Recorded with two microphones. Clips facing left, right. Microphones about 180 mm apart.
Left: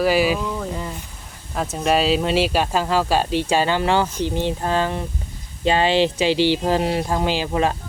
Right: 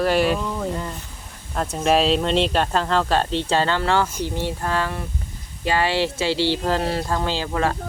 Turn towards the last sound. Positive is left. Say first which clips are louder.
# left 2 dB
turn(degrees=20)  # may be behind; listen again after turning